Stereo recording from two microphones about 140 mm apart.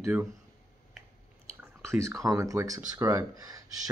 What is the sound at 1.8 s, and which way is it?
Speech, 20° right (ahead or behind).